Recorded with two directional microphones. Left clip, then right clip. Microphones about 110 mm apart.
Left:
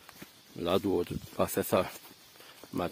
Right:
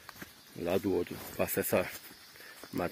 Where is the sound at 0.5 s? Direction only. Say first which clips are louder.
Left 2 dB; 50° left (ahead or behind).